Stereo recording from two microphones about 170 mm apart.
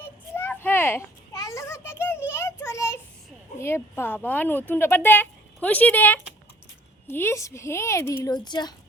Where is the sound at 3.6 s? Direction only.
15° left (ahead or behind).